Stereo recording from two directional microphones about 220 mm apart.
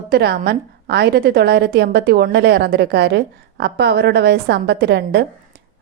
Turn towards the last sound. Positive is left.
turn(degrees=-50)  # may be behind; listen again after turning